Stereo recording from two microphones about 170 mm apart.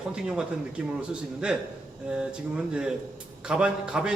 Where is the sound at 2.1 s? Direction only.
5° right (ahead or behind).